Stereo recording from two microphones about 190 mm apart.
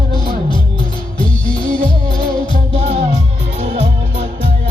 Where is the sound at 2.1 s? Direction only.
45° right (ahead or behind).